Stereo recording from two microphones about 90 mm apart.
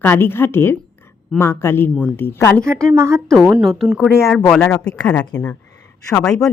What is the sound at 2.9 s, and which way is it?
Speech, 35° right (ahead or behind).